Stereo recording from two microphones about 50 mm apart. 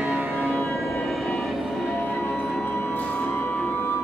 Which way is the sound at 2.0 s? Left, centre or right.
Centre.